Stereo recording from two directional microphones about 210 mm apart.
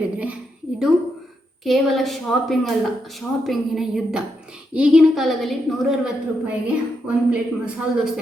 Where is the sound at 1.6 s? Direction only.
Centre (ahead or behind).